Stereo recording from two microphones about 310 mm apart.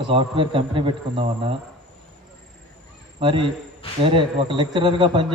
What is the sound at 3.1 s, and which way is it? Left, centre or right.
A man's voice, centre.